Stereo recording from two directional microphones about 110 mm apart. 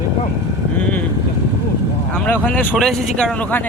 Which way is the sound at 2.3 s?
15° left (ahead or behind).